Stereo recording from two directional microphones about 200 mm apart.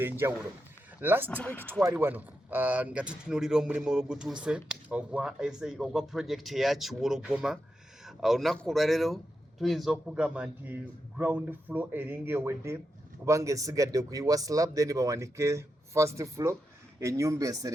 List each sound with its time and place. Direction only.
0.0 s speech: 10° right (ahead or behind)
1.3 s speech: 10° left (ahead or behind)
1.8 s speech: 10° right (ahead or behind)